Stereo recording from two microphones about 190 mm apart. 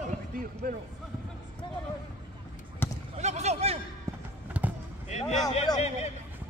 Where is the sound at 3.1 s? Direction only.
35° right (ahead or behind).